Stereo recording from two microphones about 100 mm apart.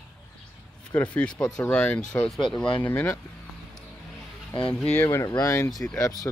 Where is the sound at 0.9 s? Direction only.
15° left (ahead or behind).